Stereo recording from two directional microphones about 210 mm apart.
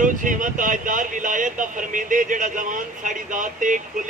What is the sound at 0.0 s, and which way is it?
Speech, 40° right (ahead or behind).